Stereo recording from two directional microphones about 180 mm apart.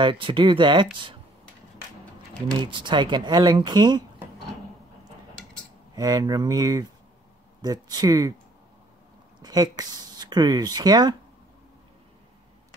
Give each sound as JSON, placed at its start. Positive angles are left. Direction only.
{"t": 0.0, "sound": "speech", "side_deg": -25}
{"t": 2.5, "sound": "speech", "side_deg": -25}
{"t": 5.9, "sound": "speech", "side_deg": -20}
{"t": 9.4, "sound": "speech", "side_deg": -20}